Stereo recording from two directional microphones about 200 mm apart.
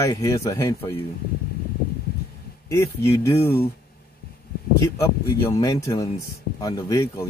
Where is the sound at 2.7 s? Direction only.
15° left (ahead or behind).